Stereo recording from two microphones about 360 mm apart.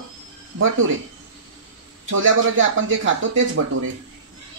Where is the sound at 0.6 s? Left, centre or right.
Right.